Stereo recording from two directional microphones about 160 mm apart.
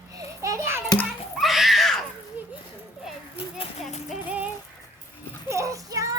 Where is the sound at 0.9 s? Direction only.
Centre (ahead or behind).